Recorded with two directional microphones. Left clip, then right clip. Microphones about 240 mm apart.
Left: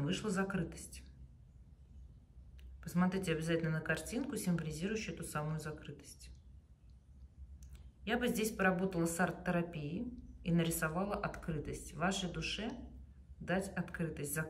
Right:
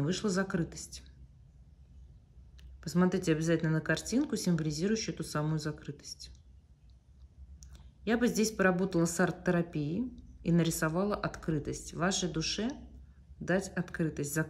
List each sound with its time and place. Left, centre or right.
0.0 s speech: centre
2.8 s a woman's voice: centre
7.6 s a woman's voice: centre